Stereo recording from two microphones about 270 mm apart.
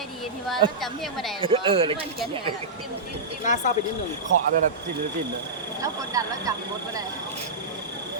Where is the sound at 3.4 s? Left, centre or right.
Left.